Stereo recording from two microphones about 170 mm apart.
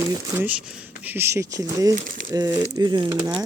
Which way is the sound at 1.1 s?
15° right (ahead or behind).